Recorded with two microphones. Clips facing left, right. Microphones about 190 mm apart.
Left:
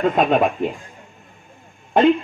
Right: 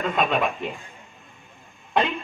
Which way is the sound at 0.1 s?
45° left (ahead or behind).